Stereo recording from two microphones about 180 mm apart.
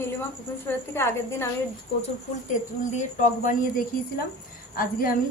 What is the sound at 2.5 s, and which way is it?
Speech, 45° left (ahead or behind).